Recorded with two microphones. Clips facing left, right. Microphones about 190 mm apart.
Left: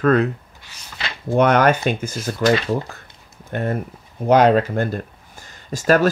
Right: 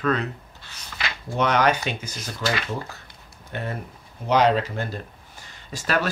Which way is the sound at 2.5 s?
30° left (ahead or behind).